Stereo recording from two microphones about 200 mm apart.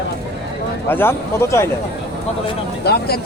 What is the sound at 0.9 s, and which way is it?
Speech, 10° left (ahead or behind).